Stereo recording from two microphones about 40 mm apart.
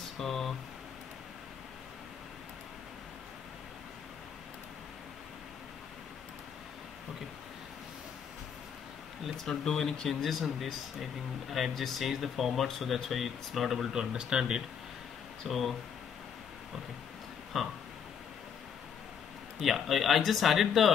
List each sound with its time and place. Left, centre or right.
0.2 s speech: centre
9.4 s speech: centre
10.0 s speech: centre
13.9 s speech: right
17.5 s speech: centre
19.6 s speech: centre